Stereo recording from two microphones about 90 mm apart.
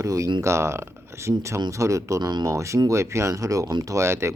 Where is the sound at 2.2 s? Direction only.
50° right (ahead or behind).